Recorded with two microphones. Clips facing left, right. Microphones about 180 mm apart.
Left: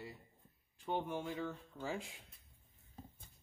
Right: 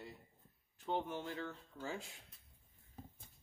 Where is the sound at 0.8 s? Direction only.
10° left (ahead or behind).